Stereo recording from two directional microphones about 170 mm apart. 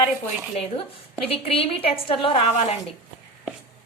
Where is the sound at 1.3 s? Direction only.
35° left (ahead or behind).